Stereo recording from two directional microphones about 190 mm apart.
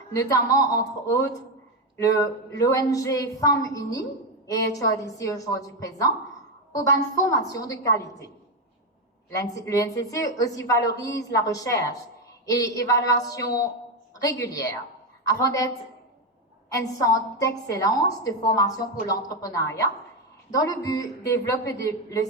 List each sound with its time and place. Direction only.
0.1 s a woman's voice: 15° left (ahead or behind)
9.6 s a woman's voice: 15° left (ahead or behind)